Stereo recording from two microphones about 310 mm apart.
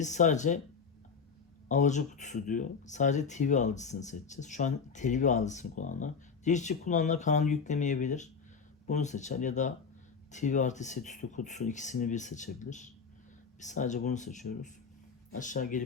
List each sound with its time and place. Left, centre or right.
0.0 s speech: left
1.7 s speech: left